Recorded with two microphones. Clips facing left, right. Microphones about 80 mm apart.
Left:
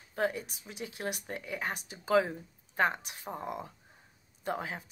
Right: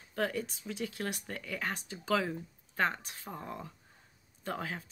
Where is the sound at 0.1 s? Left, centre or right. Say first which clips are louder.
Left 1 dB; centre.